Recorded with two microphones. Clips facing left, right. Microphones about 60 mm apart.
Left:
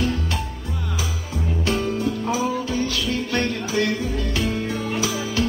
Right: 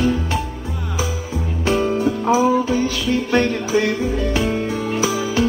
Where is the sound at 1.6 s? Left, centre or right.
Right.